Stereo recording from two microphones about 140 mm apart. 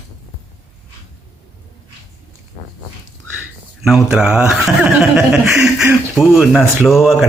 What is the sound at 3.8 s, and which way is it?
A woman's voice, 5° right (ahead or behind).